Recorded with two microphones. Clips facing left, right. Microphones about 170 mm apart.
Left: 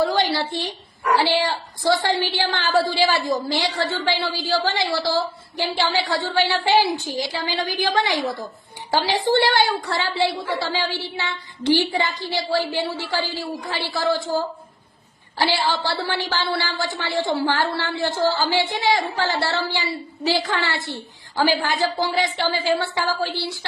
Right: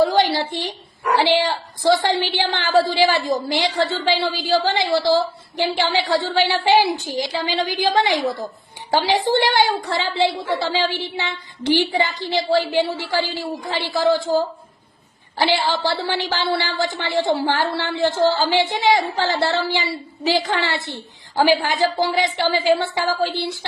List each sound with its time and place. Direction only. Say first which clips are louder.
0.2 s a woman's voice: right 3 dB; 20° right (ahead or behind)
15.4 s a woman's voice: right 2 dB; 20° right (ahead or behind)